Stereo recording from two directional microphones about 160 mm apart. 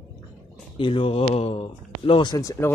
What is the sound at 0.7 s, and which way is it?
Speech, 35° left (ahead or behind).